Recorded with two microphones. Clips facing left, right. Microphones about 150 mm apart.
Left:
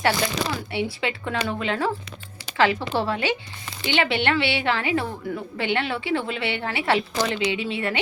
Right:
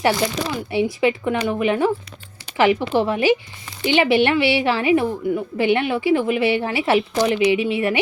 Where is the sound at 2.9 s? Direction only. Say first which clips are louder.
Right 7 dB; 20° right (ahead or behind).